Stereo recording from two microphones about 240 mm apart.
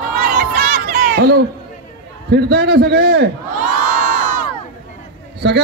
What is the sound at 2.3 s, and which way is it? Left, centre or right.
Speech, right.